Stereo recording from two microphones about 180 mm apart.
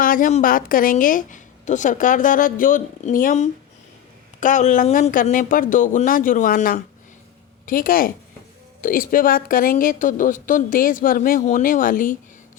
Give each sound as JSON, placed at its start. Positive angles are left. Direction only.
{"t": 0.0, "sound": "a woman's voice", "side_deg": 50}